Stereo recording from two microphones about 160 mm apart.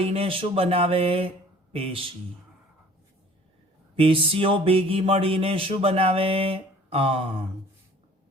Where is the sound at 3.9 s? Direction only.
35° right (ahead or behind).